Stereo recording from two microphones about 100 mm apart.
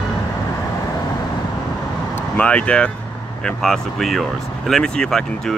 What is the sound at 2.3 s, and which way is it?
Speech, 10° left (ahead or behind).